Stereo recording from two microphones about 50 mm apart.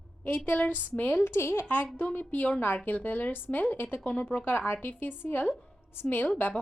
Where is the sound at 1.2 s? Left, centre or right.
Left.